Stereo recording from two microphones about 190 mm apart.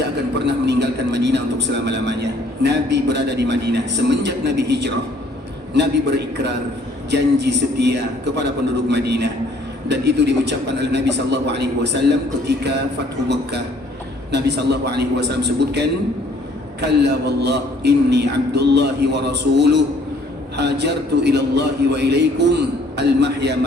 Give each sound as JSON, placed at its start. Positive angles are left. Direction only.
{"t": 0.3, "sound": "a man's voice", "side_deg": -65}
{"t": 16.8, "sound": "a man's voice", "side_deg": -65}